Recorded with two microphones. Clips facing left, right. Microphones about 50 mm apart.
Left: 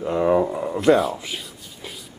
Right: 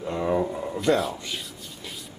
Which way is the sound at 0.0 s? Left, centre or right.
Centre.